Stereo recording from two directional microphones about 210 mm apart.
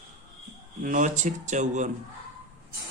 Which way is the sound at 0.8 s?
40° right (ahead or behind).